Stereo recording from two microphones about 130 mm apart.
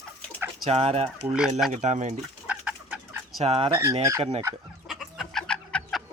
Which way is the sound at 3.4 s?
50° right (ahead or behind).